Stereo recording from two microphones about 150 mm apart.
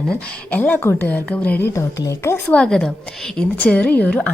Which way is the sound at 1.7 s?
20° left (ahead or behind).